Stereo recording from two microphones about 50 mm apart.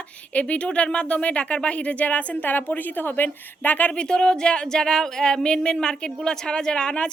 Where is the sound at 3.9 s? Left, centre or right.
Centre.